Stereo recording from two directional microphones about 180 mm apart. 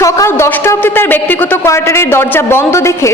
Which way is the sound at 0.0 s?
15° left (ahead or behind).